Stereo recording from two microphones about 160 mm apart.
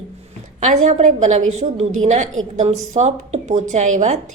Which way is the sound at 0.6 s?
50° right (ahead or behind).